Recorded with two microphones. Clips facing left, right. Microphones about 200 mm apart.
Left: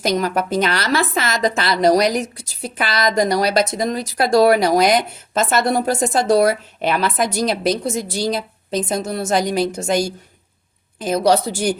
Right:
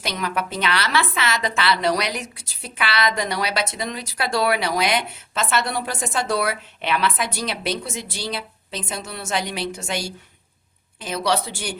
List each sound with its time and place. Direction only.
0.0 s a woman's voice: 40° left (ahead or behind)